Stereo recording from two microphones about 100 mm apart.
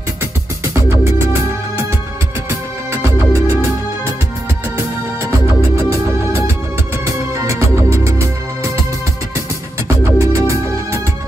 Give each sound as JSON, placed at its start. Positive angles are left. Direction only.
{"t": 0.7, "sound": "music", "side_deg": -25}
{"t": 2.9, "sound": "music", "side_deg": -25}
{"t": 7.1, "sound": "music", "side_deg": -30}
{"t": 10.1, "sound": "music", "side_deg": -30}